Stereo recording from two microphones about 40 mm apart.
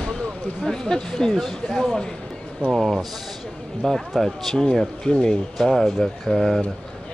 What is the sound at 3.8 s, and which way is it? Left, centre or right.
Speech, centre.